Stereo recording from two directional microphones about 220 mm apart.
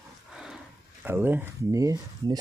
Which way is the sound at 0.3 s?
Centre (ahead or behind).